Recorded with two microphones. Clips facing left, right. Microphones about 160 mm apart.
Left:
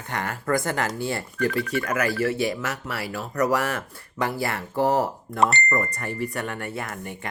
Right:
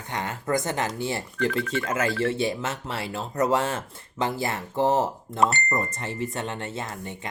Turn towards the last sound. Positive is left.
turn(degrees=-20)  # may be behind; listen again after turning